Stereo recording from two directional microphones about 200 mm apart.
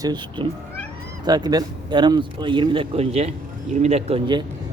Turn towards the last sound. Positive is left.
turn(degrees=-25)  # may be behind; listen again after turning